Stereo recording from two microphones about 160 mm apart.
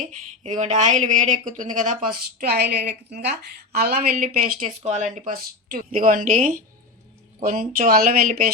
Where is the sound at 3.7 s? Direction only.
70° right (ahead or behind).